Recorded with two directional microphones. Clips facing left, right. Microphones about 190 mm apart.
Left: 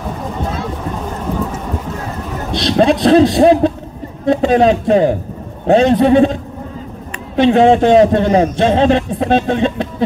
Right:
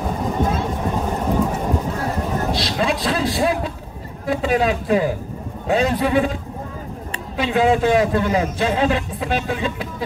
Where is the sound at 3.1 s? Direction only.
25° left (ahead or behind).